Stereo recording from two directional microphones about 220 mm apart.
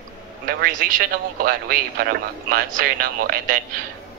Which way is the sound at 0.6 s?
35° right (ahead or behind).